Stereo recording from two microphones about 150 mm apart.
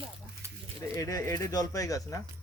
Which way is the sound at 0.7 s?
20° left (ahead or behind).